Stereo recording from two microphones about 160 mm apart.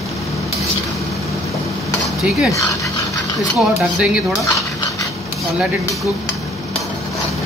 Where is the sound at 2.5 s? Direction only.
20° left (ahead or behind).